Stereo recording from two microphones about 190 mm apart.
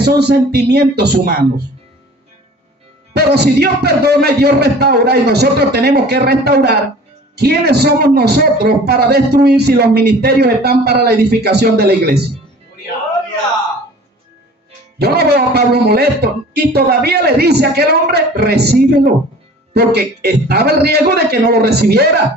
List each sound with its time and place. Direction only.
0.0 s a man's voice: 60° right (ahead or behind)
3.1 s a man's voice: 60° right (ahead or behind)
14.9 s a man's voice: 55° right (ahead or behind)